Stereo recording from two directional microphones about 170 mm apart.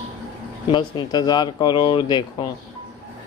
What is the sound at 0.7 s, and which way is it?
Speech, 25° left (ahead or behind).